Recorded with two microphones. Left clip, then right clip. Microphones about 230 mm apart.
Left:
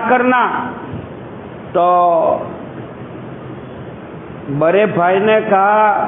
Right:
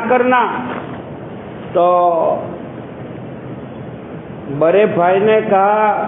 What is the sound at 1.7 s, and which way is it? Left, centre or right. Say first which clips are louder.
Speech: even; left.